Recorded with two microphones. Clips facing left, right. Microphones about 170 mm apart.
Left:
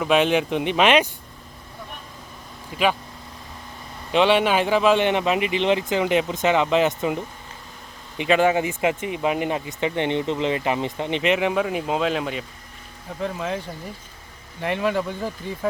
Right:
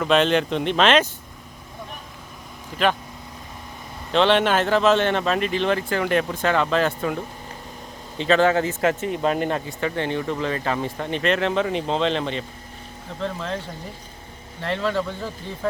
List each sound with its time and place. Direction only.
0.0 s speech: 10° left (ahead or behind)
2.7 s speech: 10° left (ahead or behind)
4.1 s speech: 10° left (ahead or behind)
8.2 s speech: 10° left (ahead or behind)
14.6 s speech: 10° left (ahead or behind)